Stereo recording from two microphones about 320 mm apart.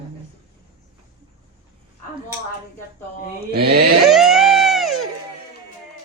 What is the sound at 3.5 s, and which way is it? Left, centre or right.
Speech, right.